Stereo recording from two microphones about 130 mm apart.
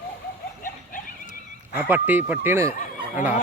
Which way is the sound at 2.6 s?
75° left (ahead or behind).